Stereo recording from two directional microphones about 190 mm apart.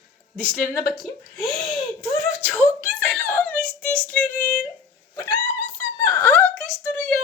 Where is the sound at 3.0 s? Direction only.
10° left (ahead or behind).